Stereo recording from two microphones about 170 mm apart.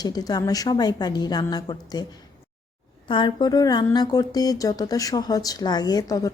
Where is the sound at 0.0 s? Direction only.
25° left (ahead or behind).